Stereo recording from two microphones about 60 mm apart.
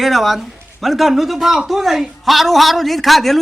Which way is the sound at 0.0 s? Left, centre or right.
Centre.